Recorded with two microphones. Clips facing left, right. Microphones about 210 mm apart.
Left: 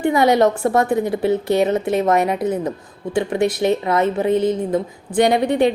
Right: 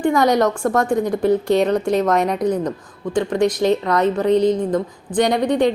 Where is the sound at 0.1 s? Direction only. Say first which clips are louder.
Left 2 dB; 5° left (ahead or behind).